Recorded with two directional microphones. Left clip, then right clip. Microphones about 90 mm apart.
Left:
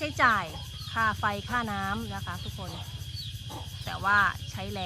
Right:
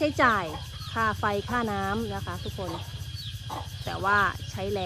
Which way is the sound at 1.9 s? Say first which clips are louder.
Right 5 dB; 10° left (ahead or behind).